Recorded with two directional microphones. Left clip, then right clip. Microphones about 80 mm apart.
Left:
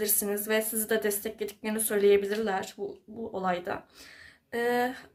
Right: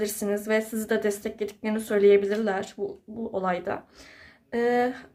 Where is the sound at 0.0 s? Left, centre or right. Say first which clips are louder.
Right 3 dB; right.